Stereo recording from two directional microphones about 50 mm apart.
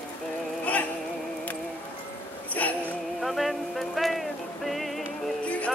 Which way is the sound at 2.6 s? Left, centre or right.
Left.